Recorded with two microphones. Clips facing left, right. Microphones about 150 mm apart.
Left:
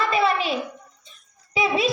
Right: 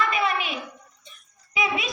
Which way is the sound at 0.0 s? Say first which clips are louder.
Left 4 dB; 30° left (ahead or behind).